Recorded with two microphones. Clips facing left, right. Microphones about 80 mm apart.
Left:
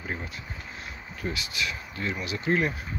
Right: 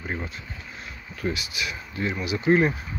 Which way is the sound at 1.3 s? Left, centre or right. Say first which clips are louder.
Right 1 dB; centre.